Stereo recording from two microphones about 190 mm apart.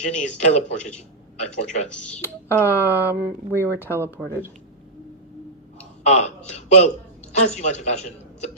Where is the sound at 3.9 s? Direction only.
15° left (ahead or behind).